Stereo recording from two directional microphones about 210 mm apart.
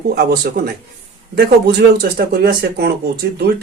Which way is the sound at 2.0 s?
45° right (ahead or behind).